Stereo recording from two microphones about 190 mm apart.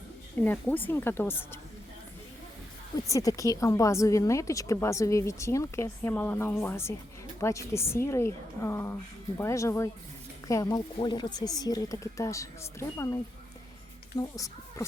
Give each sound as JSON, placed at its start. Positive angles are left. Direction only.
{"t": 0.4, "sound": "a woman's voice", "side_deg": 10}
{"t": 3.1, "sound": "a woman's voice", "side_deg": 15}
{"t": 14.2, "sound": "a woman's voice", "side_deg": 15}